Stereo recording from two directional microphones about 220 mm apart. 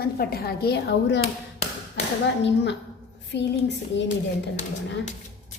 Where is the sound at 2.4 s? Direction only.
50° left (ahead or behind).